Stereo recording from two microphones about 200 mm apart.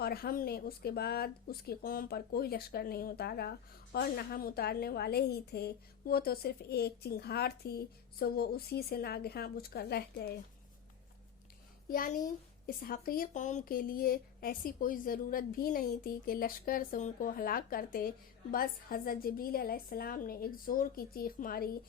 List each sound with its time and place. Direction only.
0.0 s a woman's voice: 50° left (ahead or behind)
11.9 s a woman's voice: 45° left (ahead or behind)